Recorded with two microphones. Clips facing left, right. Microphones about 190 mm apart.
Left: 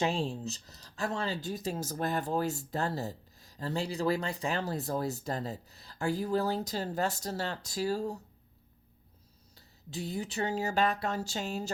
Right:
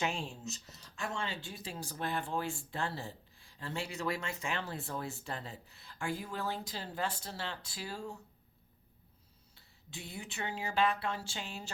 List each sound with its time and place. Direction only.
0.0 s speech: 35° left (ahead or behind)
9.6 s speech: 40° left (ahead or behind)